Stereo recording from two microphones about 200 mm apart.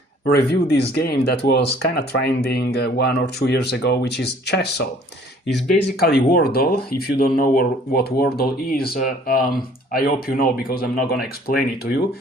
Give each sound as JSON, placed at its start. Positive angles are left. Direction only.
{"t": 0.3, "sound": "speech", "side_deg": 55}
{"t": 6.0, "sound": "speech", "side_deg": 50}